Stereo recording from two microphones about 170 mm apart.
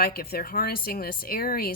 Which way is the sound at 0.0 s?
60° left (ahead or behind).